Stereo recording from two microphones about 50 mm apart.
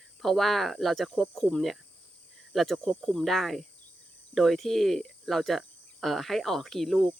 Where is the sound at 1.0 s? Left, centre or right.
Centre.